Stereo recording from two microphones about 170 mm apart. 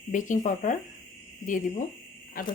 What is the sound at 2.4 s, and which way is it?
Speech, 60° left (ahead or behind).